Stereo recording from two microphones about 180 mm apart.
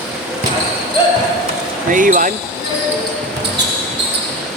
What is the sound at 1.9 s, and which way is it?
Speech, 45° right (ahead or behind).